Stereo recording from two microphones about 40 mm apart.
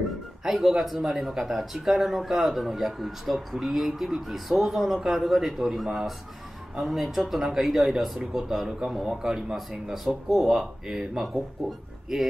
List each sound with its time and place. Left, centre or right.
0.4 s speech: centre